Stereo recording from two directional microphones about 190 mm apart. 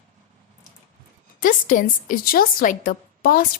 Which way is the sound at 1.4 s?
45° left (ahead or behind).